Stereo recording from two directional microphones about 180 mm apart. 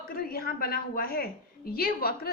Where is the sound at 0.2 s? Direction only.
55° left (ahead or behind).